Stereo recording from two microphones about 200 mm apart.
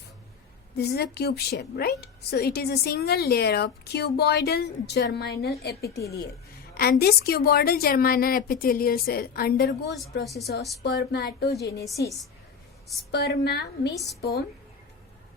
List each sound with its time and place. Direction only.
0.8 s a woman's voice: 55° left (ahead or behind)
6.0 s speech: 15° left (ahead or behind)
6.7 s a woman's voice: 50° left (ahead or behind)
13.1 s a woman's voice: 55° left (ahead or behind)